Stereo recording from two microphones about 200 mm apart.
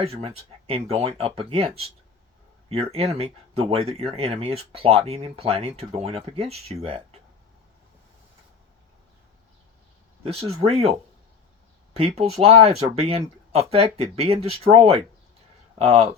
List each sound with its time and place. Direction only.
0.0 s speech: 30° right (ahead or behind)
10.2 s speech: 30° right (ahead or behind)
11.9 s speech: 30° right (ahead or behind)